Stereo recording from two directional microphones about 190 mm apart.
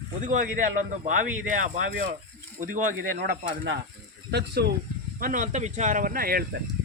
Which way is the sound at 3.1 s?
65° right (ahead or behind).